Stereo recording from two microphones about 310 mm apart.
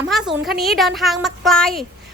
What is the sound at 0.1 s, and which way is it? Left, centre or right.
A woman's voice, centre.